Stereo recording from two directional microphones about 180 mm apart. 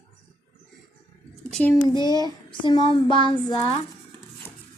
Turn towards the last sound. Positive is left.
turn(degrees=25)  # may be behind; listen again after turning